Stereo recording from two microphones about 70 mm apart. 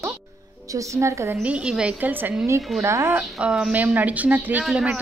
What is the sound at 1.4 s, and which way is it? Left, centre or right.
Speech, centre.